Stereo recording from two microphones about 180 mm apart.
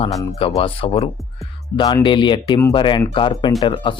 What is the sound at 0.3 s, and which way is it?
Speech, 30° left (ahead or behind).